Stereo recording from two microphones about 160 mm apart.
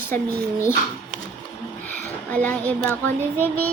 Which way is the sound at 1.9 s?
10° left (ahead or behind).